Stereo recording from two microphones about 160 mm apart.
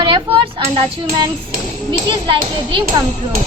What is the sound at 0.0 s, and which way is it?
Speech, 30° right (ahead or behind).